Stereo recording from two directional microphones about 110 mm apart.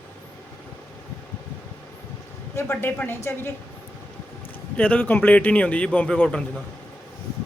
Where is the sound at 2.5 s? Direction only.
20° left (ahead or behind).